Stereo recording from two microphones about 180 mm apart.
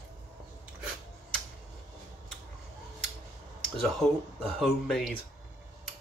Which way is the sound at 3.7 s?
Centre (ahead or behind).